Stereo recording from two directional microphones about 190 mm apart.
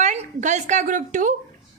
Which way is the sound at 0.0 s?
40° right (ahead or behind).